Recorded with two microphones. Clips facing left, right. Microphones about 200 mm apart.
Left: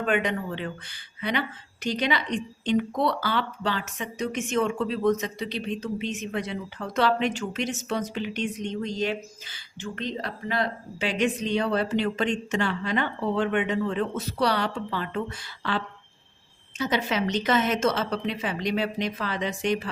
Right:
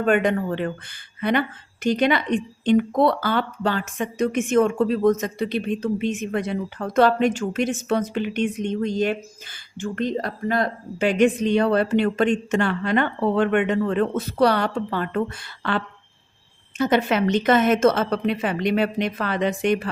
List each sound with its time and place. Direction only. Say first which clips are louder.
0.0 s a woman's voice: right 6 dB; 50° right (ahead or behind)